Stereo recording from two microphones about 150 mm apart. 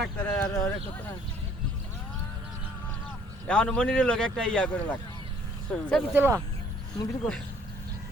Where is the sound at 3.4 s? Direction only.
5° left (ahead or behind).